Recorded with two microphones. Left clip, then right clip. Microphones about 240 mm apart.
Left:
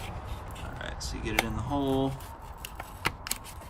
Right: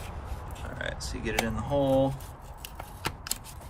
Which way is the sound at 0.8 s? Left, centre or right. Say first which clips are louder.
Right 4 dB; centre.